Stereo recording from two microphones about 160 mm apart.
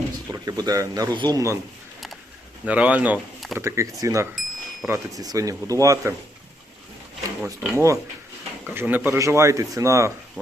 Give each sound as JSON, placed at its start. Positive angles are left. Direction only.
{"t": 0.3, "sound": "speech", "side_deg": -25}
{"t": 2.6, "sound": "speech", "side_deg": -10}
{"t": 3.6, "sound": "speech", "side_deg": -15}
{"t": 7.4, "sound": "speech", "side_deg": -15}